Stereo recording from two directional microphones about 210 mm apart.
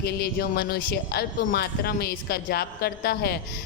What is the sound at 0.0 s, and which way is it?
A man's voice, 45° left (ahead or behind).